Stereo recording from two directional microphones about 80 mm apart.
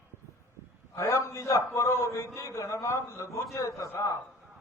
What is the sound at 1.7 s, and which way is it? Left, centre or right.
A man's voice, left.